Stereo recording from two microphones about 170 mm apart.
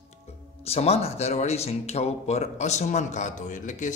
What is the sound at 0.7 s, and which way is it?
Speech, 35° left (ahead or behind).